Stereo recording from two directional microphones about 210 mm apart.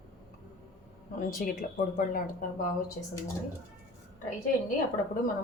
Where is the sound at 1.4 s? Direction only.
40° left (ahead or behind).